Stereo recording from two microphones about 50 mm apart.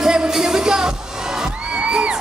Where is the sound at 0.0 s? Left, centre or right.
Centre.